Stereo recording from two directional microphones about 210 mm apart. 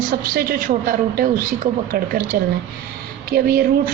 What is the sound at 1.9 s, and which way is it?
Speech, 45° right (ahead or behind).